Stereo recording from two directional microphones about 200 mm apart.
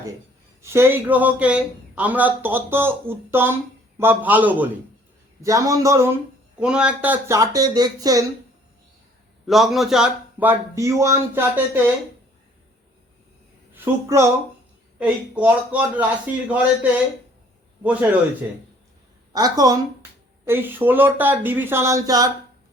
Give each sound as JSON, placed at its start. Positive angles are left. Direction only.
{"t": 0.6, "sound": "speech", "side_deg": -15}
{"t": 9.5, "sound": "speech", "side_deg": 0}
{"t": 13.7, "sound": "speech", "side_deg": -15}
{"t": 19.3, "sound": "speech", "side_deg": -20}